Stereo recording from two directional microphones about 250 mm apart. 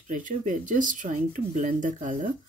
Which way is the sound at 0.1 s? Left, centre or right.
Right.